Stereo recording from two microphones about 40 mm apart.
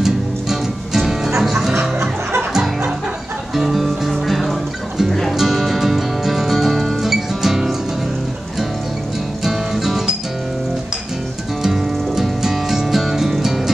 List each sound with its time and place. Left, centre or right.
0.0 s music: centre
3.5 s music: centre
9.4 s music: centre
11.6 s music: centre